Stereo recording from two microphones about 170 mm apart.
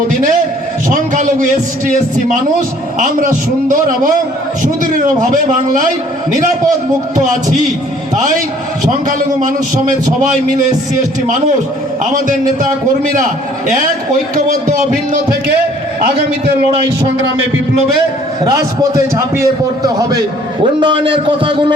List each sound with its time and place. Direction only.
0.1 s a man's voice: 50° right (ahead or behind)
3.0 s a man's voice: 50° right (ahead or behind)
18.4 s a man's voice: 20° right (ahead or behind)